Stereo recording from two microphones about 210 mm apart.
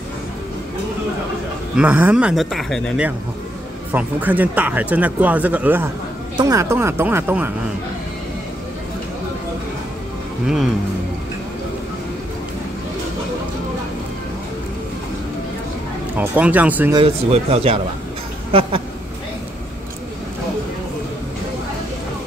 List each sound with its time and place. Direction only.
1.8 s speech: 5° right (ahead or behind)
10.4 s speech: centre (ahead or behind)
16.2 s speech: 5° right (ahead or behind)
16.9 s speech: 30° right (ahead or behind)
18.5 s a sound: 25° right (ahead or behind)